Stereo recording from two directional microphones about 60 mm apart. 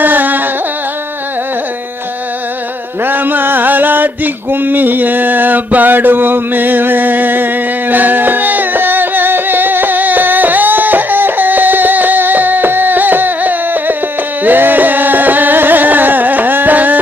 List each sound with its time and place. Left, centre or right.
0.0 s carnatic music: right
3.0 s a sound: right
14.4 s music: right